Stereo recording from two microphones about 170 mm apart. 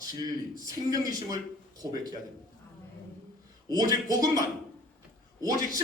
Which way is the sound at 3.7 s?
20° right (ahead or behind).